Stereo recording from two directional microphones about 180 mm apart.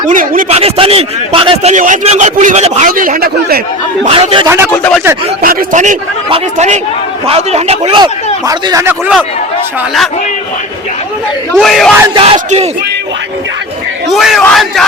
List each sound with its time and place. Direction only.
0.0 s a man's voice: 50° right (ahead or behind)
0.5 s speech: 35° right (ahead or behind)
1.7 s a man's voice: 45° right (ahead or behind)
4.0 s speech: 35° right (ahead or behind)
4.4 s speech: 15° right (ahead or behind)
4.7 s speech: 10° left (ahead or behind)
5.4 s a man's voice: 50° right (ahead or behind); by 9.1 s 15° right (ahead or behind)
11.5 s speech: centre (ahead or behind)
12.1 s speech: 35° right (ahead or behind)
14.1 s speech: centre (ahead or behind)